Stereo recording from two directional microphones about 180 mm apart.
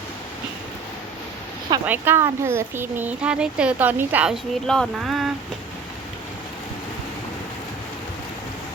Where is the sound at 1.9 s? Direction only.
10° right (ahead or behind).